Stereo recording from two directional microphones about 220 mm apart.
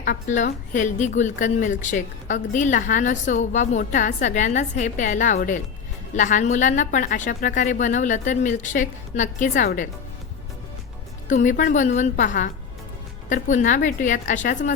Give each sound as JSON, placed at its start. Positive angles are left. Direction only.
{"t": 0.0, "sound": "a woman's voice", "side_deg": 35}
{"t": 11.3, "sound": "a woman's voice", "side_deg": 35}